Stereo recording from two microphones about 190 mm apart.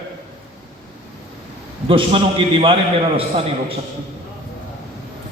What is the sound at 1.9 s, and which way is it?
A man's voice, 30° right (ahead or behind).